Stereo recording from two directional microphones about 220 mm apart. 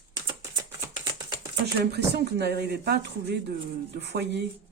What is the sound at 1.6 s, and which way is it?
A woman's voice, 50° right (ahead or behind).